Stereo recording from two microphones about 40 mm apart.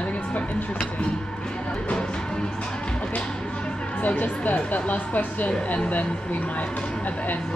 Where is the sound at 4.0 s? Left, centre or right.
Left.